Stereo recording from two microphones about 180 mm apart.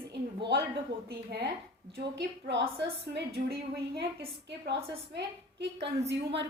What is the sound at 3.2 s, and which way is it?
A woman's voice, 65° right (ahead or behind).